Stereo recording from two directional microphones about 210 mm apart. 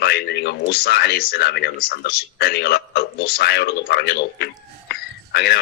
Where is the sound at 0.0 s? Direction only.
50° left (ahead or behind).